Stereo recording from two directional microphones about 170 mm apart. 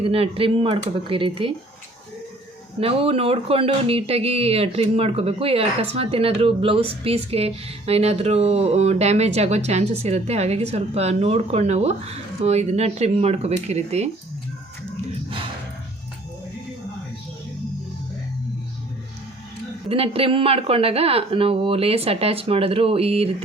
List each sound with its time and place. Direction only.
0.0 s speech: 35° right (ahead or behind)
2.8 s speech: 35° right (ahead or behind)
19.9 s speech: 35° right (ahead or behind)